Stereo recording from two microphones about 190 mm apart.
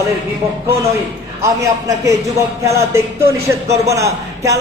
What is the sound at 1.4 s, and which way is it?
A man's voice, 15° right (ahead or behind).